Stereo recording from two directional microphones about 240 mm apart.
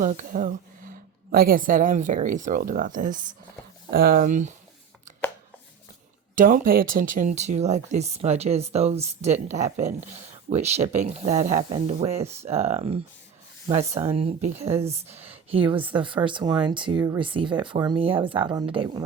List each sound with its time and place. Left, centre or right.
0.0 s a woman's voice: right
6.3 s speech: right